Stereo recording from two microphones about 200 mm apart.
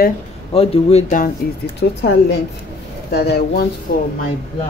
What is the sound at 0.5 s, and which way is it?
Speech, 30° left (ahead or behind).